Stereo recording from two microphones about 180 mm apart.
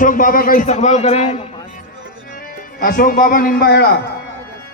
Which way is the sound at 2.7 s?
50° left (ahead or behind).